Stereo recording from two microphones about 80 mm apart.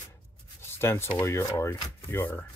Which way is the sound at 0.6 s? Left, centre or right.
Left.